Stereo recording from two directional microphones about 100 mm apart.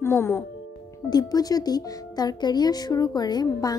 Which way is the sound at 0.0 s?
25° left (ahead or behind).